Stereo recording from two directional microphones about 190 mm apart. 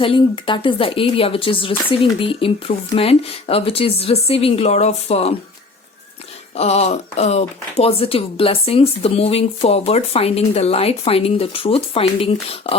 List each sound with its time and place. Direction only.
0.0 s speech: 25° left (ahead or behind)
6.6 s speech: 35° left (ahead or behind)